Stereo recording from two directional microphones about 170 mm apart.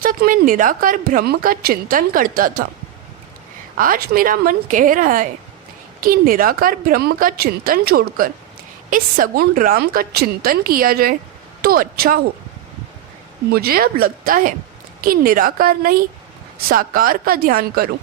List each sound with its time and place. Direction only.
0.0 s a woman's voice: 55° right (ahead or behind)
3.8 s a woman's voice: 55° right (ahead or behind)
13.5 s a woman's voice: 65° right (ahead or behind)